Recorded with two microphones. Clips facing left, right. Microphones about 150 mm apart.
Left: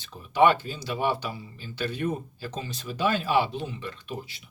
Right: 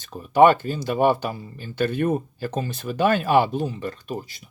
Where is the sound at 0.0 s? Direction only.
45° right (ahead or behind).